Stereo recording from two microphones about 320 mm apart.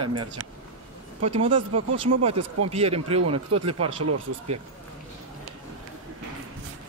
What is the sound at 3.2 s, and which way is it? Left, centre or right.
Speech, right.